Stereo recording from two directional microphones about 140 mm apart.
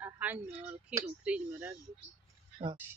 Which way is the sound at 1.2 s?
10° right (ahead or behind).